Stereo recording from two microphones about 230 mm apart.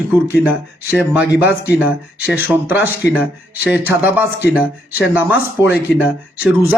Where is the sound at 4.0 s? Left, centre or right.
Centre.